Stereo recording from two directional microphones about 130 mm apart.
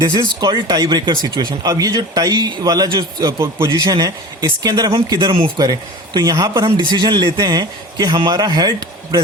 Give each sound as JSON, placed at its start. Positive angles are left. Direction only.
{"t": 0.0, "sound": "speech", "side_deg": -30}
{"t": 6.1, "sound": "speech", "side_deg": -25}
{"t": 6.9, "sound": "speech", "side_deg": -35}